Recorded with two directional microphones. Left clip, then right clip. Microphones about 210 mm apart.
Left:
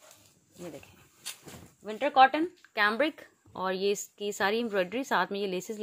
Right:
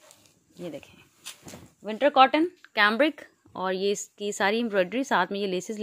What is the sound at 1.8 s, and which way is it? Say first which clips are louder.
Speech: right 3 dB; 50° right (ahead or behind).